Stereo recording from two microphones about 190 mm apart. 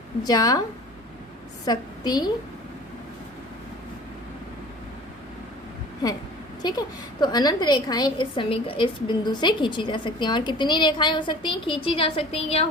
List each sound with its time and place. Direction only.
0.2 s a woman's voice: 20° left (ahead or behind)
1.6 s a woman's voice: 20° left (ahead or behind)
6.6 s a woman's voice: 20° left (ahead or behind)